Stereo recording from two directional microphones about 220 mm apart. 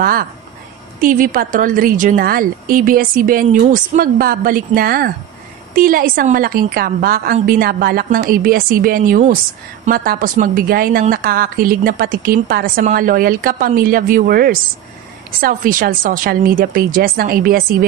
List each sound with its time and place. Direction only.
0.0 s a woman's voice: 40° right (ahead or behind)